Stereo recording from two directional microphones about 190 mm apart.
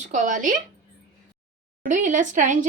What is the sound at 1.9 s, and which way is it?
Speech, 40° right (ahead or behind).